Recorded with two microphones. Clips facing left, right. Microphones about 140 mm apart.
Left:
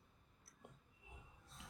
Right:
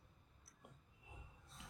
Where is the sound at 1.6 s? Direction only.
Centre (ahead or behind).